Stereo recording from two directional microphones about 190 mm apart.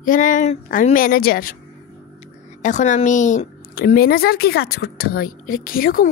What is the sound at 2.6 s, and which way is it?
Speech, 40° left (ahead or behind).